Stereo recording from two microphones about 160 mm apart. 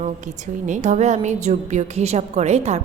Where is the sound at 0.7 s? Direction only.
45° right (ahead or behind).